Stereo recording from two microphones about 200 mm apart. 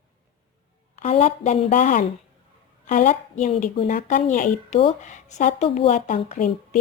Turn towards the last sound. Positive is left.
turn(degrees=35)  # may be behind; listen again after turning